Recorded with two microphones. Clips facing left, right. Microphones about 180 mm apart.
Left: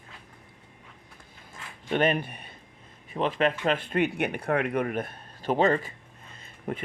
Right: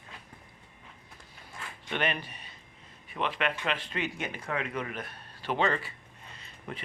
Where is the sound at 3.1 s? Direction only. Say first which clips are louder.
Left 6 dB; 40° left (ahead or behind).